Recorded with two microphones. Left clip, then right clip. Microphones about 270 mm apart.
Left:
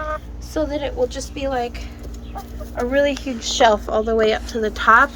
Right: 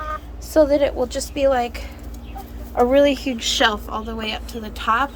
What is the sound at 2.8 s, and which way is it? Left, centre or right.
Speech, centre.